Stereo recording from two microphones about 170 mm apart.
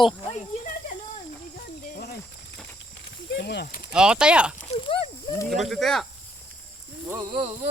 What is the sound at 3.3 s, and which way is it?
Speech, 75° left (ahead or behind).